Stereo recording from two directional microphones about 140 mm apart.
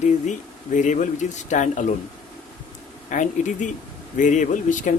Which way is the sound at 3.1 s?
65° left (ahead or behind).